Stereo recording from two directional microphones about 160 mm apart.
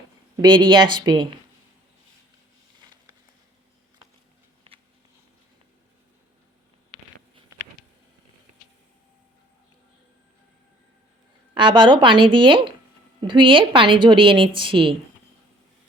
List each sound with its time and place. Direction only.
0.4 s a woman's voice: 30° right (ahead or behind)
11.5 s a woman's voice: 30° right (ahead or behind)